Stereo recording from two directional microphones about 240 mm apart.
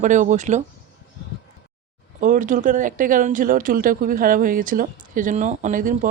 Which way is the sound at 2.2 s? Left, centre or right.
Right.